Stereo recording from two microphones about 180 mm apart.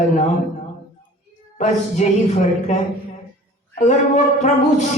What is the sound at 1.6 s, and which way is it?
A man's voice, 40° left (ahead or behind).